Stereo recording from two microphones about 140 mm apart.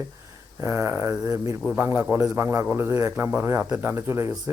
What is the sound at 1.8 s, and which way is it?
Speech, 15° right (ahead or behind).